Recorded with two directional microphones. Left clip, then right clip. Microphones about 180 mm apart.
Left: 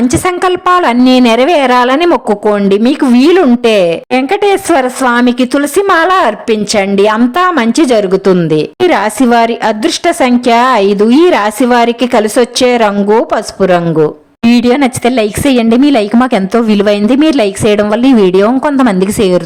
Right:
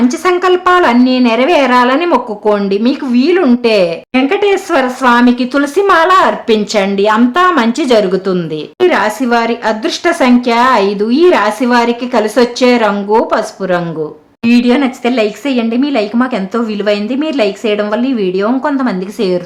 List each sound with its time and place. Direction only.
0.1 s a woman's voice: 45° left (ahead or behind)
14.4 s a woman's voice: 45° left (ahead or behind)